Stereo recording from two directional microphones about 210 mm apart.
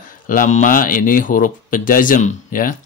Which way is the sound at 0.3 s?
40° left (ahead or behind).